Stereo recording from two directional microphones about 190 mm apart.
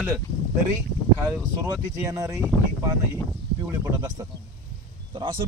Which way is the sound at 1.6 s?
15° right (ahead or behind).